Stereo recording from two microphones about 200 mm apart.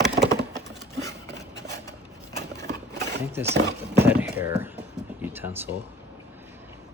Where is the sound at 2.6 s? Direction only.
60° right (ahead or behind).